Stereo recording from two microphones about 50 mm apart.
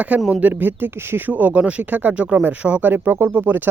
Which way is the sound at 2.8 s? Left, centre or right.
Right.